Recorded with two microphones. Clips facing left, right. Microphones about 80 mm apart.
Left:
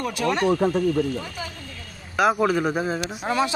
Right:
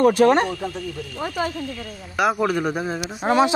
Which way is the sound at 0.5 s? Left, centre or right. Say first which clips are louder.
Left 8 dB; left.